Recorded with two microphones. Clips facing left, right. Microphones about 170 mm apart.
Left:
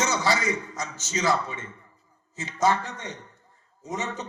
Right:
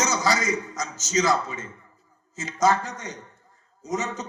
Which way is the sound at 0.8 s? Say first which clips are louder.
Right 5 dB; 40° right (ahead or behind).